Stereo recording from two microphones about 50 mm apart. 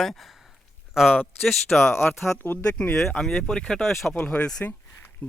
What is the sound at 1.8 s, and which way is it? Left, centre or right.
Speech, left.